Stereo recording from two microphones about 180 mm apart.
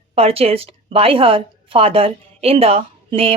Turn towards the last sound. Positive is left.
turn(degrees=-30)  # may be behind; listen again after turning